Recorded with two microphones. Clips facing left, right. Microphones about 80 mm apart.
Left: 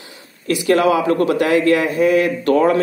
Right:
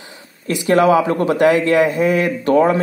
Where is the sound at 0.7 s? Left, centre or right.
Right.